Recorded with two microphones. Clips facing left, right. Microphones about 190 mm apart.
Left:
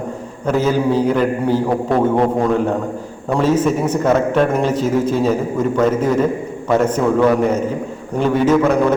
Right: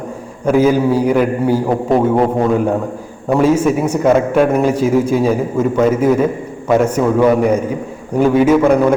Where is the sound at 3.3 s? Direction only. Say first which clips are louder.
Right 3 dB; 10° right (ahead or behind).